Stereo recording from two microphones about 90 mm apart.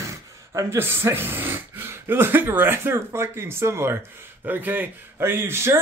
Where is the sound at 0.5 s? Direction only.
25° right (ahead or behind).